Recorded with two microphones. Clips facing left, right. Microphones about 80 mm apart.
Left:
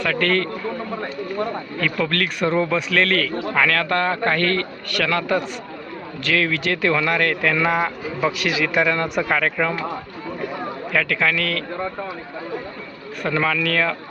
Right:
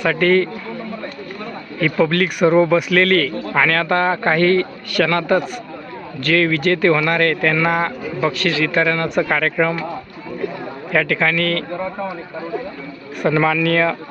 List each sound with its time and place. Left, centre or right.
0.0 s a man's voice: centre
1.8 s a man's voice: centre
5.0 s speech: centre
10.9 s speech: centre
13.2 s a man's voice: centre